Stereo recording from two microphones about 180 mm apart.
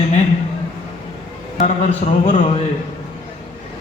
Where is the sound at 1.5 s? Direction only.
40° left (ahead or behind).